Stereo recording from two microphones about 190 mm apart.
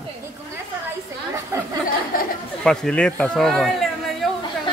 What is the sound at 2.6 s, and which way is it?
Speech, 5° left (ahead or behind).